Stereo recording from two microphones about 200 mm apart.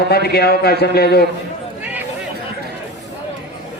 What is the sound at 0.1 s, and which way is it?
A man's voice, 50° left (ahead or behind).